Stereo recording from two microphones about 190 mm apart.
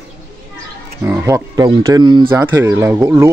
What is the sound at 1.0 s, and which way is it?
Speech, 15° right (ahead or behind).